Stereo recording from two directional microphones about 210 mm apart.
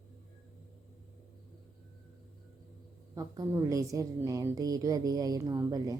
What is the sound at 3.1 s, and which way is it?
A woman's voice, 15° right (ahead or behind).